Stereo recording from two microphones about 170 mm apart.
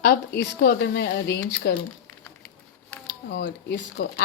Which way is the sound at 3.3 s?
80° left.